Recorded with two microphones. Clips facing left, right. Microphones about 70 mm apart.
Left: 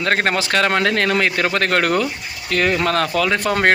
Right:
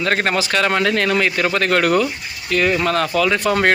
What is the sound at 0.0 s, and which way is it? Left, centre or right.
Speech, left.